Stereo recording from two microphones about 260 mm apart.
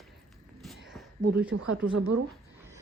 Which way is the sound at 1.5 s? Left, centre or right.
Right.